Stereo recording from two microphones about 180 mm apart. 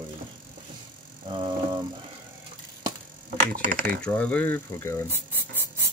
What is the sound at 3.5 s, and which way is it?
Speech, 55° right (ahead or behind).